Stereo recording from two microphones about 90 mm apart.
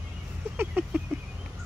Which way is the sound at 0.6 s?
20° right (ahead or behind).